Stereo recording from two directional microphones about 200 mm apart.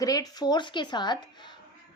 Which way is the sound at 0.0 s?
20° left (ahead or behind).